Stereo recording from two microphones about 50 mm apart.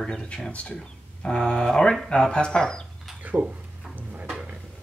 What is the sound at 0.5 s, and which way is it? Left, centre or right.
Speech, left.